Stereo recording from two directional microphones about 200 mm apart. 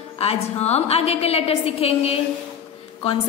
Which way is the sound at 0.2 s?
30° left (ahead or behind).